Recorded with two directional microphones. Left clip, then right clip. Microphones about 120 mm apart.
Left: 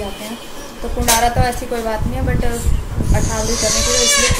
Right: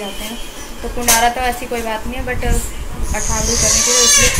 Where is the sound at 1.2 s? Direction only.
10° left (ahead or behind).